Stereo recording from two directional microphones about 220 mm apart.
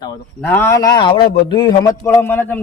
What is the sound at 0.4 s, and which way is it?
A man's voice, 10° left (ahead or behind).